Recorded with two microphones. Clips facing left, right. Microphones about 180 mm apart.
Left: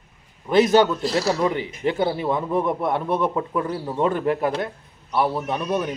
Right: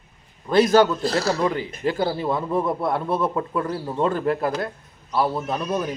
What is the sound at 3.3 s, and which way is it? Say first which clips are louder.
Speech: even; 15° left (ahead or behind).